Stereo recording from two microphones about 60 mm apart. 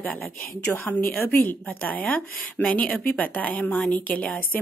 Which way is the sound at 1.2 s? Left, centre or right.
Left.